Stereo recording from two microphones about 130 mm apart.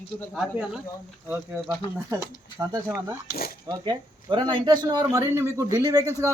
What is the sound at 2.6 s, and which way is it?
A man's voice, 25° right (ahead or behind).